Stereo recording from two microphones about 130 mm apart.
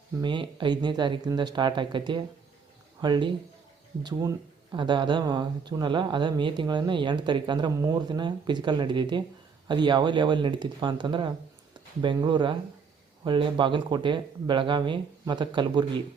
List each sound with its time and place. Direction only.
0.2 s speech: 35° right (ahead or behind)